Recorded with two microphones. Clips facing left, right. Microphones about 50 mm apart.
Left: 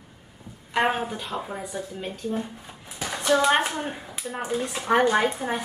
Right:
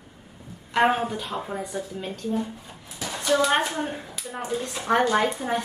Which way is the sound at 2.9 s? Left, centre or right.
Left.